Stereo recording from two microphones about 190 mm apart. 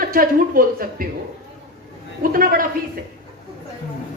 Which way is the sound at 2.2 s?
50° right (ahead or behind).